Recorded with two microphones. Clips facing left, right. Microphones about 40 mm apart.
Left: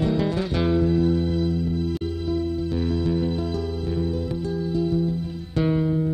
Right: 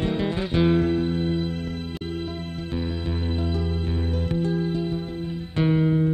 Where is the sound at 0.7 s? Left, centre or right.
Right.